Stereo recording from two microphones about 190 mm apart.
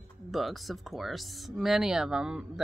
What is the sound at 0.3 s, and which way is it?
Speech, centre (ahead or behind).